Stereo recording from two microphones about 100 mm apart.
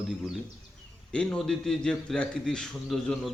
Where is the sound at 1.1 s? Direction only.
10° left (ahead or behind).